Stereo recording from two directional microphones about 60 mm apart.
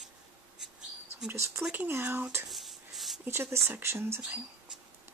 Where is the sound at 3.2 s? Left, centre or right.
Right.